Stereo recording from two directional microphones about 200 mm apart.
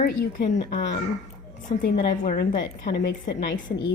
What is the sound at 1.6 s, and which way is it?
A woman's voice, 40° left (ahead or behind).